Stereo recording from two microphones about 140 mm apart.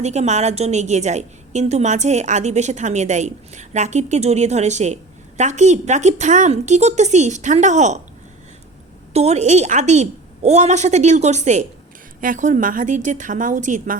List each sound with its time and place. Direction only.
0.0 s a woman's voice: 55° right (ahead or behind)
9.1 s a woman's voice: 50° right (ahead or behind)
12.2 s a woman's voice: 70° right (ahead or behind)